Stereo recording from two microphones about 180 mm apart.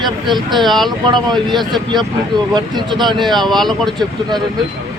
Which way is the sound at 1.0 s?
25° right (ahead or behind).